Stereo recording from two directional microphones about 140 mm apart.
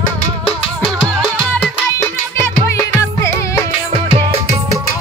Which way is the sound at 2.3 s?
20° left (ahead or behind).